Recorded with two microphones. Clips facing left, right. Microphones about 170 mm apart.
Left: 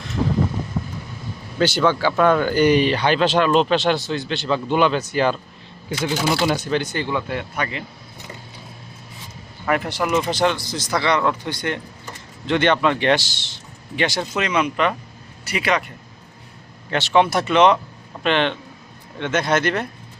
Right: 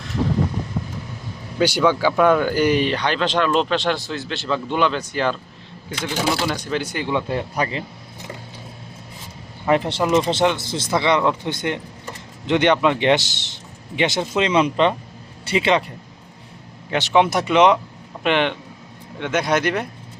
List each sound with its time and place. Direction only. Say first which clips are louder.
1.5 s speech: right 1 dB; 10° right (ahead or behind); by 6.6 s 10° left (ahead or behind)
6.7 s a man's voice: left 1 dB; 5° right (ahead or behind); by 7.9 s 30° right (ahead or behind)
9.6 s a man's voice: right 3 dB; 25° right (ahead or behind)
16.9 s speech: even; 15° right (ahead or behind)